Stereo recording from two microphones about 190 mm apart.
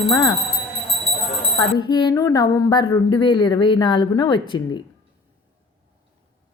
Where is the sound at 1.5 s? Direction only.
20° left (ahead or behind).